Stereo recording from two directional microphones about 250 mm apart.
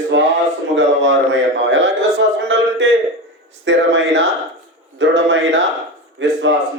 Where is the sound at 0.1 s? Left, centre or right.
Right.